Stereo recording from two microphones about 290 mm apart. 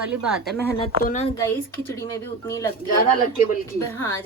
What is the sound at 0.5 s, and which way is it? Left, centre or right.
Speech, centre.